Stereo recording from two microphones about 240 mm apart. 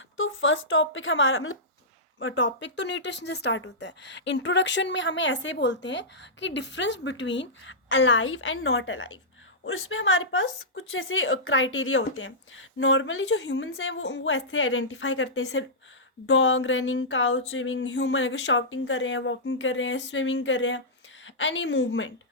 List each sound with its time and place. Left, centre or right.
0.2 s speech: left